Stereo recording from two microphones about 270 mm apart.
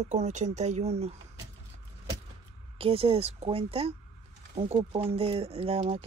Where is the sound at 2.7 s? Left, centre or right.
Right.